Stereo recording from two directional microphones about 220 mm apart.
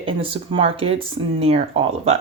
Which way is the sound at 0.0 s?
25° right (ahead or behind).